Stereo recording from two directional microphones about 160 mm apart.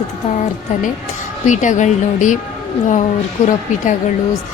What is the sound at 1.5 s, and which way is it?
Speech, 50° left (ahead or behind).